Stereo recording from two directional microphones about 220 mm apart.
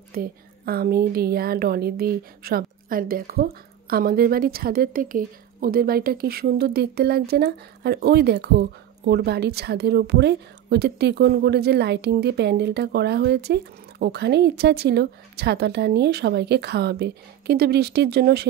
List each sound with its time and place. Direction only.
0.1 s a woman's voice: 45° right (ahead or behind)